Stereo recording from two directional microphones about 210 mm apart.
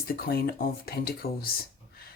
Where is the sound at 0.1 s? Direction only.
45° left (ahead or behind).